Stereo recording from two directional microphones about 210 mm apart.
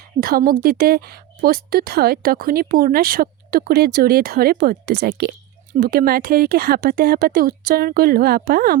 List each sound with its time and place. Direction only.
0.2 s speech: 45° right (ahead or behind)